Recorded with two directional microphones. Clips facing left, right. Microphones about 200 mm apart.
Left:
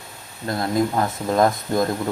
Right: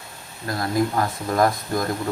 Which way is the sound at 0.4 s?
20° left (ahead or behind).